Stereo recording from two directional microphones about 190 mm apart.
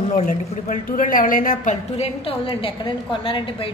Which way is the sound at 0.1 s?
45° left (ahead or behind).